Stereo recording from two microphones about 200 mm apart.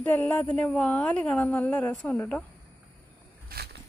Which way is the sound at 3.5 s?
55° right (ahead or behind).